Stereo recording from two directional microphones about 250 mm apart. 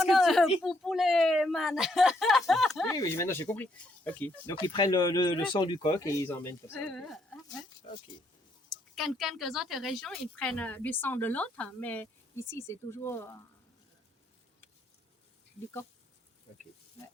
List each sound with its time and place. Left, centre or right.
0.0 s a sound: centre
0.6 s speech: centre
2.9 s speech: centre
9.0 s speech: centre